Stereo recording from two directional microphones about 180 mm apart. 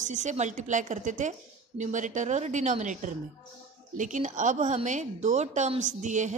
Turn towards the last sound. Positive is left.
turn(degrees=-40)  # may be behind; listen again after turning